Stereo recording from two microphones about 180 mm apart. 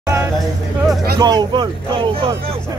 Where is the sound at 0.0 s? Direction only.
15° right (ahead or behind).